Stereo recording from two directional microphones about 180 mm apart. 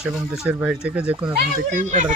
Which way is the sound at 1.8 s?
45° right (ahead or behind).